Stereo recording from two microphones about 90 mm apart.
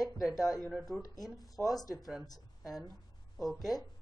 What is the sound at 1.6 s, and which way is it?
Speech, 40° left (ahead or behind).